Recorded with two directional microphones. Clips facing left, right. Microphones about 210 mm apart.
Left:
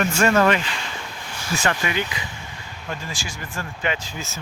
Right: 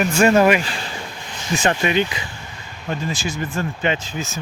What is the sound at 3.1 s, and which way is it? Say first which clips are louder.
Speech: right 9 dB; 20° right (ahead or behind).